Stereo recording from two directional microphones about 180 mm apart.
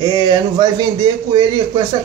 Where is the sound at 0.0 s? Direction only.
25° right (ahead or behind).